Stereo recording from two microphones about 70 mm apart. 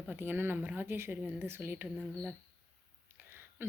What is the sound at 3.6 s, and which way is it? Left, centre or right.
Speech, right.